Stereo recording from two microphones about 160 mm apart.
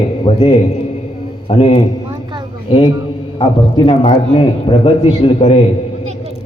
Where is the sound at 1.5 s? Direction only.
40° left (ahead or behind).